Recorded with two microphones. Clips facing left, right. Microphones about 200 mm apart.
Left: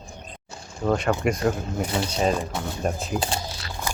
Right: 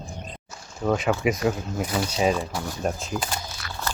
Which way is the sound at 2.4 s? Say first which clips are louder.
Left 1 dB; 20° left (ahead or behind).